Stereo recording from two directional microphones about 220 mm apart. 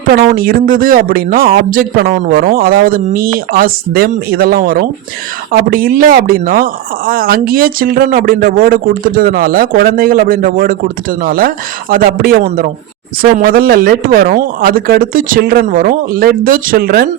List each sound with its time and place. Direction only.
0.1 s speech: 40° right (ahead or behind)